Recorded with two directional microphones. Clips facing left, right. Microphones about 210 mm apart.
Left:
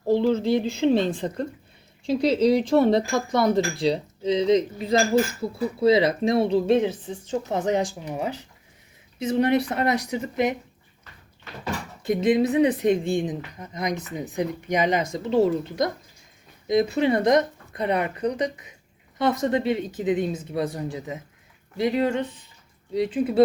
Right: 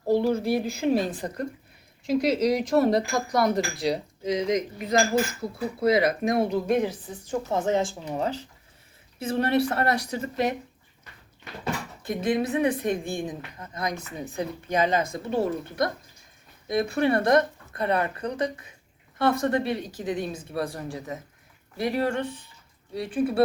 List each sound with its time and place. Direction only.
0.4 s speech: 25° left (ahead or behind)
12.0 s speech: 20° left (ahead or behind)